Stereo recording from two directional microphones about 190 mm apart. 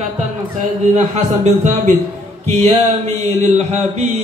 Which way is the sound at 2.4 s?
35° right (ahead or behind).